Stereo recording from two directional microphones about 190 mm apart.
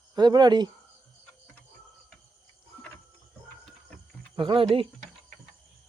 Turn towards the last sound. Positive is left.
turn(degrees=-30)  # may be behind; listen again after turning